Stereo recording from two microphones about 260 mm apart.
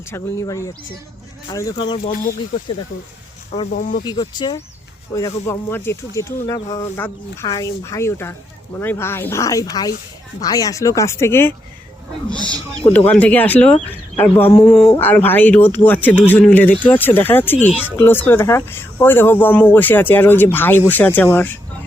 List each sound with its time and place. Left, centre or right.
0.1 s speech: centre
3.7 s speech: left
4.0 s speech: centre
13.1 s speech: centre